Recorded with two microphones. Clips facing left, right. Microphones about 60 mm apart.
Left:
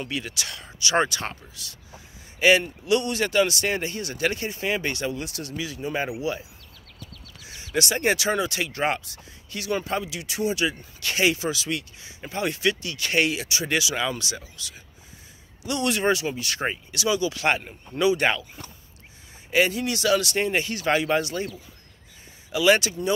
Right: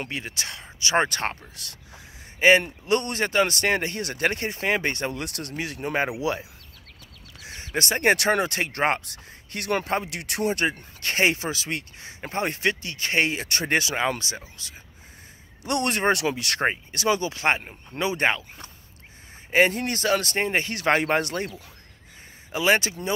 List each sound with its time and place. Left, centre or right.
0.0 s speech: right
1.0 s speech: right
2.8 s speech: right
6.1 s speech: right
7.3 s a sound: right
7.6 s speech: right
8.0 s speech: right
15.6 s speech: right
16.2 s speech: right
16.6 s speech: right
17.4 s speech: right
19.5 s speech: right
20.7 s speech: right
22.5 s speech: right